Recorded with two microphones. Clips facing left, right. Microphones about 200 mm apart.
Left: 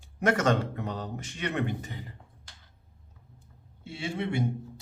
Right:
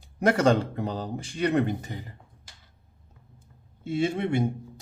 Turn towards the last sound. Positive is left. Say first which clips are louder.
# right 6 dB
turn(degrees=-45)  # may be behind; listen again after turning